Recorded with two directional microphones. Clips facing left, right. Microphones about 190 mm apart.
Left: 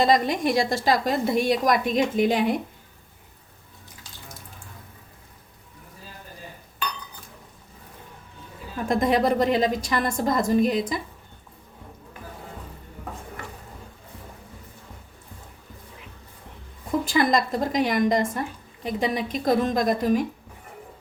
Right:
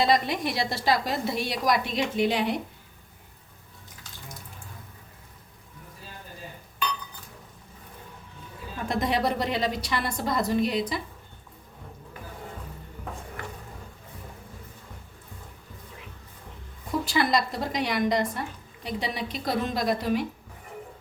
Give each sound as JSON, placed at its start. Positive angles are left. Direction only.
{"t": 0.0, "sound": "a woman's voice", "side_deg": 45}
{"t": 8.9, "sound": "a woman's voice", "side_deg": 50}
{"t": 17.1, "sound": "a woman's voice", "side_deg": 50}